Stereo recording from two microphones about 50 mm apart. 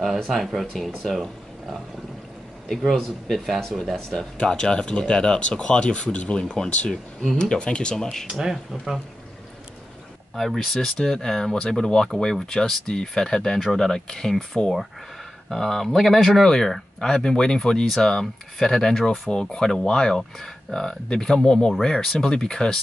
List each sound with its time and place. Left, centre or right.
0.0 s speech: centre
4.4 s speech: centre
7.9 s speech: centre
8.3 s speech: centre
10.3 s speech: centre